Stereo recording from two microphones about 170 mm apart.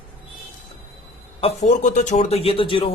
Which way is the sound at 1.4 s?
40° left (ahead or behind).